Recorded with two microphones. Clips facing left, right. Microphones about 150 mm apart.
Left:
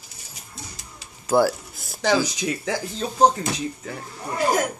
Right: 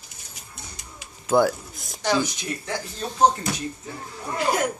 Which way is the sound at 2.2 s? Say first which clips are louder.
Left 4 dB; 90° left.